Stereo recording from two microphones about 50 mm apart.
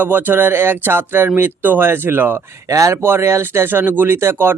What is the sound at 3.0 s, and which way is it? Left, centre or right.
Speech, right.